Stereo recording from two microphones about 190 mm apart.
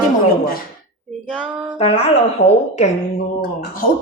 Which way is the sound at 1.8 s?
30° left (ahead or behind).